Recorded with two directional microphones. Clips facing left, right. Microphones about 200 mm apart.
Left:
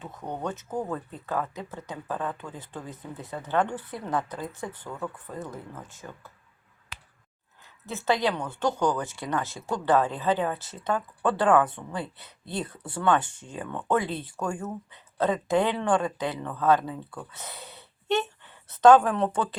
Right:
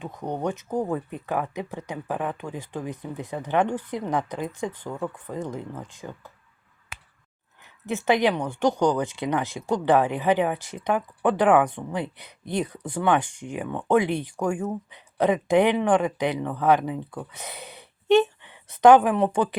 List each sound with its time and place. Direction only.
0.0 s speech: 15° right (ahead or behind)
7.6 s a woman's voice: 15° right (ahead or behind)